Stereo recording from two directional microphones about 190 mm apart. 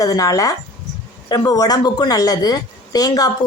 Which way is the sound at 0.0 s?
20° left (ahead or behind).